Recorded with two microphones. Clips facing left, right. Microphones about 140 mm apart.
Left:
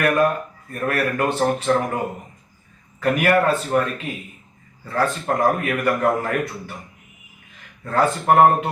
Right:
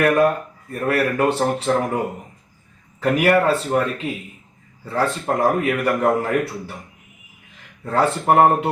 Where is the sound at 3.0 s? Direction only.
30° right (ahead or behind).